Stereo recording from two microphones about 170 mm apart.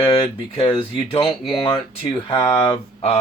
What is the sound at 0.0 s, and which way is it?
Speech, 30° left (ahead or behind).